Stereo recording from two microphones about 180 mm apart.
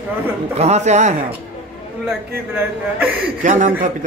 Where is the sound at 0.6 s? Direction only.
40° right (ahead or behind).